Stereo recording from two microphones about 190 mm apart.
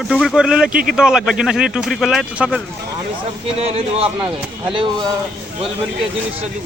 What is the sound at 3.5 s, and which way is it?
Speech, 30° right (ahead or behind).